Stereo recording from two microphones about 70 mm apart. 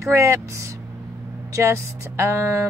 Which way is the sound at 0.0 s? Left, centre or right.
Right.